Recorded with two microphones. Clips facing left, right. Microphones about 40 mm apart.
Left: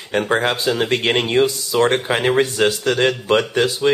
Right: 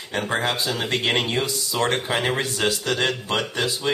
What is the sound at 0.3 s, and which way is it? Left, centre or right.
Speech, left.